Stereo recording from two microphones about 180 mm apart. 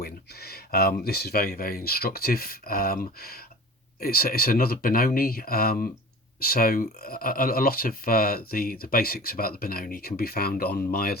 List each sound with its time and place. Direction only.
0.0 s speech: 60° left (ahead or behind)